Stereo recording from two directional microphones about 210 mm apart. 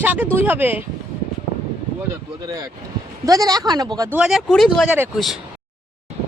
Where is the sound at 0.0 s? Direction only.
10° right (ahead or behind).